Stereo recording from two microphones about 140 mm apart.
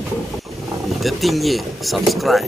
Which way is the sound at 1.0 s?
Centre (ahead or behind).